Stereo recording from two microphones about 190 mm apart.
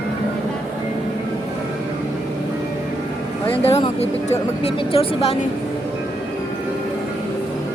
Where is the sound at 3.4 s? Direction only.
10° left (ahead or behind).